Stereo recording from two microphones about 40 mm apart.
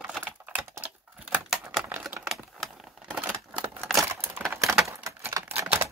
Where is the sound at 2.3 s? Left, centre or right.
Centre.